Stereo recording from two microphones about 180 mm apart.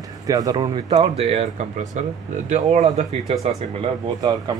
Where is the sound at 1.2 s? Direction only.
35° right (ahead or behind).